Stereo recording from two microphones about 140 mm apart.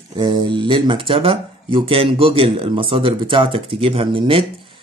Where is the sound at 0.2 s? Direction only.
35° right (ahead or behind).